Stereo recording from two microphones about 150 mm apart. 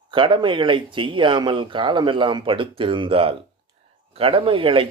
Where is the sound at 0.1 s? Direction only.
35° right (ahead or behind).